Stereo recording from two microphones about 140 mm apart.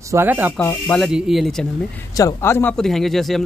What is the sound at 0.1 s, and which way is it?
Speech, 15° right (ahead or behind).